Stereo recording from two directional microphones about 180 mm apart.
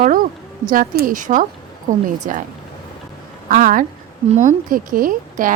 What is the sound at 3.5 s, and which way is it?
Speech, 50° right (ahead or behind).